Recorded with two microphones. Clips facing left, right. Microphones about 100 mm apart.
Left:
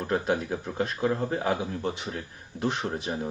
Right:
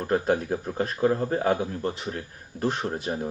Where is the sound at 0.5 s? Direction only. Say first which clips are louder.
Right 2 dB; 35° right (ahead or behind).